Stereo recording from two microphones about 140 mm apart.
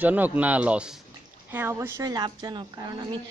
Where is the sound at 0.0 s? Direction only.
10° right (ahead or behind).